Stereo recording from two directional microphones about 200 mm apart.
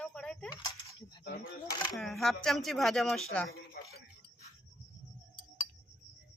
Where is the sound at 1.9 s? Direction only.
Centre (ahead or behind).